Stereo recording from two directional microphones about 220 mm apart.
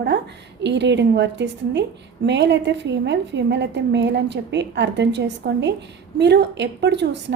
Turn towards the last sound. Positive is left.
turn(degrees=-50)  # may be behind; listen again after turning